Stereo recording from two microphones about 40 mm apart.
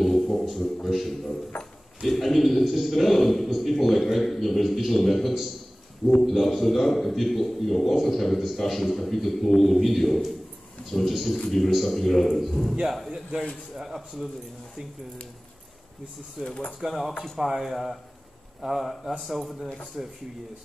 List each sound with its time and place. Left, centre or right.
0.0 s a sound: centre
0.8 s a man's voice: centre
1.5 s drawer open or close: left
2.0 s a man's voice: centre
16.4 s speech: left
16.8 s a man's voice: centre
20.0 s speech: right